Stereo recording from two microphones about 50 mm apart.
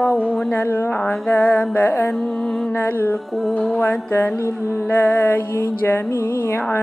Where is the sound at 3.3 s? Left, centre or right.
Centre.